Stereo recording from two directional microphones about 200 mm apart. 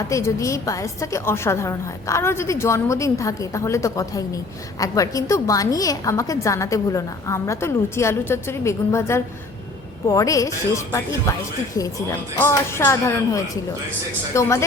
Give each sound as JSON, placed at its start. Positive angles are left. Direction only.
{"t": 0.1, "sound": "a woman's voice", "side_deg": 15}